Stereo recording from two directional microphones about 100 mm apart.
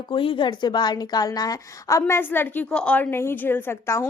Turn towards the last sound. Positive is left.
turn(degrees=25)  # may be behind; listen again after turning